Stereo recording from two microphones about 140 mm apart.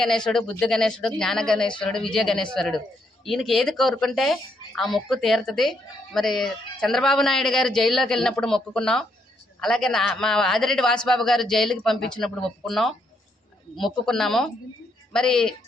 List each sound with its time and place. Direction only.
0.3 s a man's voice: 5° left (ahead or behind)